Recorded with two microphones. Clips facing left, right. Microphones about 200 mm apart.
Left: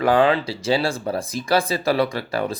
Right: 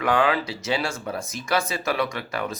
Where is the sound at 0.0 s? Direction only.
30° left (ahead or behind).